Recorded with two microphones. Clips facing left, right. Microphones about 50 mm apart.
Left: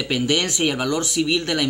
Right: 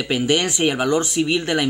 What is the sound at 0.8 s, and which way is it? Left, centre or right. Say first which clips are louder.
Speech: right 2 dB; right.